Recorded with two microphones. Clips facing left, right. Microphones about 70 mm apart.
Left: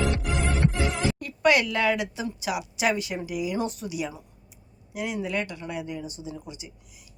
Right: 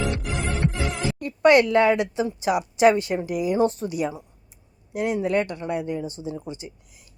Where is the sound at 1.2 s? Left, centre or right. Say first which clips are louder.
Right 7 dB; right.